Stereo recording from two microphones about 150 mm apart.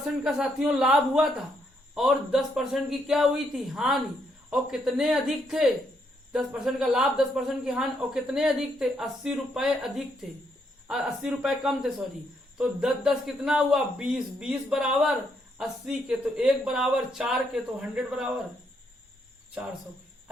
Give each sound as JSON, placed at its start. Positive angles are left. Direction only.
{"t": 0.0, "sound": "speech", "side_deg": -5}